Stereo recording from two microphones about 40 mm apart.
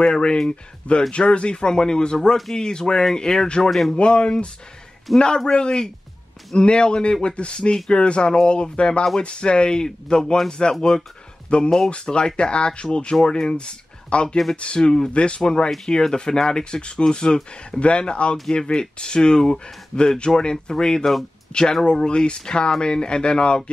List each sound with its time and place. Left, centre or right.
0.0 s speech: left
5.1 s a man's voice: centre
5.5 s speech: left
11.5 s speech: left